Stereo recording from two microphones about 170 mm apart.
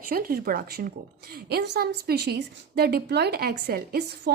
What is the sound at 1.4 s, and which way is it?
A woman's voice, 80° right.